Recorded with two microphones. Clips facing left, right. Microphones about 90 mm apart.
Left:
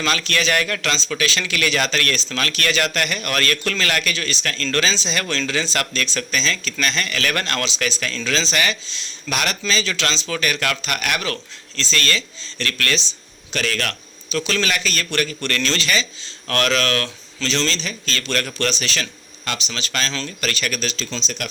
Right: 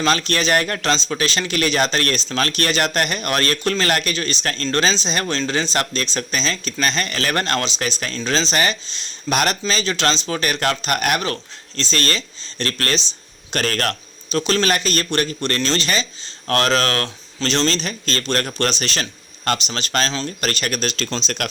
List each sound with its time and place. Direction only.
0.0 s speech: 35° right (ahead or behind); by 21.5 s 65° right (ahead or behind)